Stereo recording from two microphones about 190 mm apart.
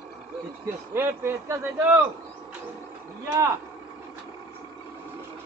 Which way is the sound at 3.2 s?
15° right (ahead or behind).